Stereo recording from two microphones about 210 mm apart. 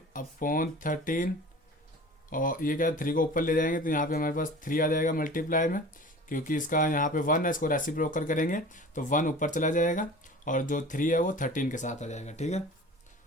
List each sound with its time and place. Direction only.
0.1 s speech: 40° left (ahead or behind)
2.3 s speech: 40° left (ahead or behind)